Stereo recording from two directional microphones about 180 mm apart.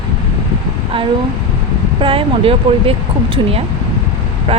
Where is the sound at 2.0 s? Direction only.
30° right (ahead or behind).